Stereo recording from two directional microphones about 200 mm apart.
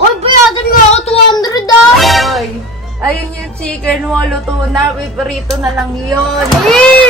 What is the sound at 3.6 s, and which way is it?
A woman's voice, 5° left (ahead or behind).